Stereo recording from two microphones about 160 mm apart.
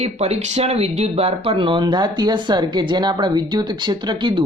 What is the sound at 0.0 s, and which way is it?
Speech, 45° right (ahead or behind).